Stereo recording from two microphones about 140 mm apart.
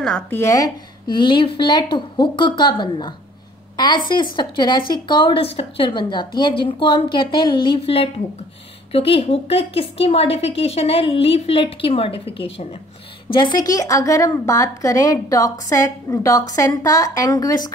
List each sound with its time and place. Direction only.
0.0 s speech: 5° left (ahead or behind)
0.4 s a woman's voice: 25° left (ahead or behind)